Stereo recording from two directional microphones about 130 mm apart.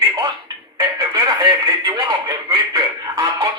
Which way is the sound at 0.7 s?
30° right (ahead or behind).